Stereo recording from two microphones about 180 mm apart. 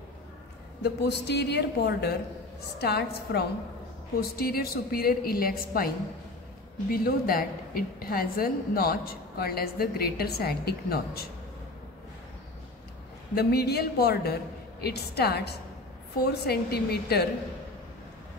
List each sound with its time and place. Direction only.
0.8 s a woman's voice: 70° left (ahead or behind)
13.3 s a woman's voice: 60° left (ahead or behind)